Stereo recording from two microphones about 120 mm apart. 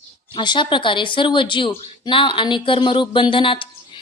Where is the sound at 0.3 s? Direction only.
40° left (ahead or behind).